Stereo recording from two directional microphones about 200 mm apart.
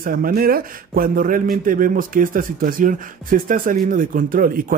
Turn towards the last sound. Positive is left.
turn(degrees=-45)  # may be behind; listen again after turning